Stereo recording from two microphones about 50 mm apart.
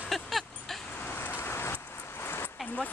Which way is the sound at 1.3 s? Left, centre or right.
Left.